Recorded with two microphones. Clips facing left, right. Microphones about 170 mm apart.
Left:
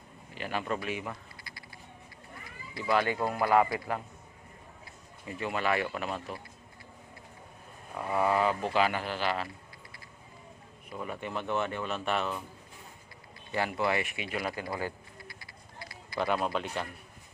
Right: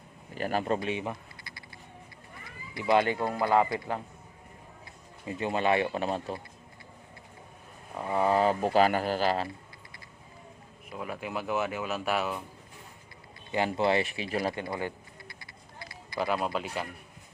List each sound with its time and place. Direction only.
0.3 s speech: 40° right (ahead or behind); by 1.6 s 25° right (ahead or behind)
2.7 s speech: 20° right (ahead or behind)
3.2 s speech: centre (ahead or behind)
3.4 s speech: 25° right (ahead or behind)
5.2 s speech: 25° right (ahead or behind)
8.1 s speech: 30° right (ahead or behind)
10.8 s speech: 5° right (ahead or behind)
13.7 s speech: 30° right (ahead or behind)
14.8 s bird: 20° right (ahead or behind)
16.1 s speech: centre (ahead or behind)